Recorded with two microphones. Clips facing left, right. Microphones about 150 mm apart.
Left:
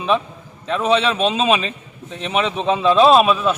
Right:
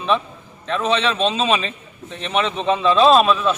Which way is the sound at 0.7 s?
5° left (ahead or behind).